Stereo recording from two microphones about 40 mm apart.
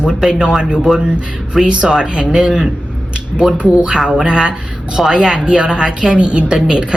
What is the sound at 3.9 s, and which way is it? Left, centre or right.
Speech, centre.